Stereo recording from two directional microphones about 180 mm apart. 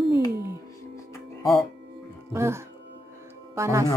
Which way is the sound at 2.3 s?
15° right (ahead or behind).